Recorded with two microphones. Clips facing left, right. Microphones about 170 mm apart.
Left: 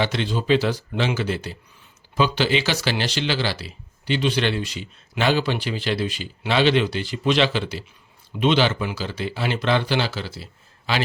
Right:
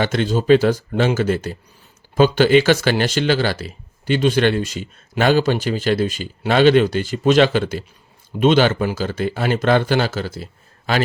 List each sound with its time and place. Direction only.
0.0 s speech: 45° right (ahead or behind)